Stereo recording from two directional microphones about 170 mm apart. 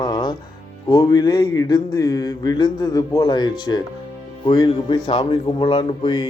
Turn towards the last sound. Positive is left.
turn(degrees=30)  # may be behind; listen again after turning